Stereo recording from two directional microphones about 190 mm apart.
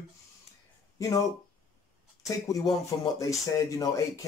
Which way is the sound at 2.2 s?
15° left (ahead or behind).